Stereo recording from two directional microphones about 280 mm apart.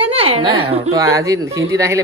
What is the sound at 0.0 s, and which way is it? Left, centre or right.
A woman's voice, right.